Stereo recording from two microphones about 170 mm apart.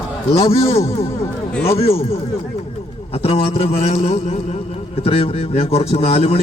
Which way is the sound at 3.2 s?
35° left (ahead or behind).